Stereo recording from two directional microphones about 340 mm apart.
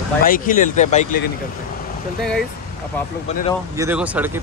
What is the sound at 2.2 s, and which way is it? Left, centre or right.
Speech, centre.